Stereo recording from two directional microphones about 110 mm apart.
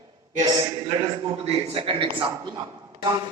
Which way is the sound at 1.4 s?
60° right (ahead or behind).